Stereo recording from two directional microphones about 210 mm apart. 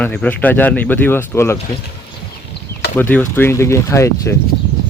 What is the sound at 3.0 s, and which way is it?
Speech, 10° left (ahead or behind).